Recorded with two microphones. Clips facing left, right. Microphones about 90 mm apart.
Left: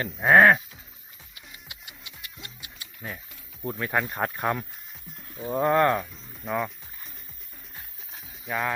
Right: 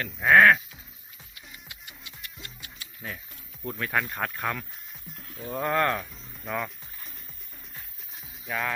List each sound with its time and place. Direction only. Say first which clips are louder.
0.2 s speech: left 1 dB; 30° left (ahead or behind)
1.6 s music: even; 15° left (ahead or behind)
3.6 s speech: left 2 dB; 15° left (ahead or behind)
4.2 s speech: left 4 dB; 20° left (ahead or behind)
5.6 s speech: left 4 dB; 5° left (ahead or behind)
8.4 s speech: left 2 dB; 5° left (ahead or behind)